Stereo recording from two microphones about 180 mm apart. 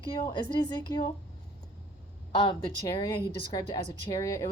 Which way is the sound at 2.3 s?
25° left (ahead or behind).